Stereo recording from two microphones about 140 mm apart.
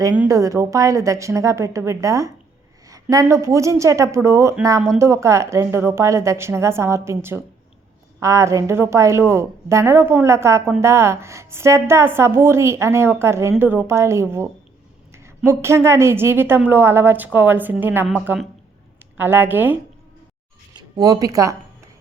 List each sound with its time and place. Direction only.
0.3 s a woman's voice: 25° right (ahead or behind)
19.1 s a woman's voice: 15° right (ahead or behind)
20.7 s speech: 30° right (ahead or behind)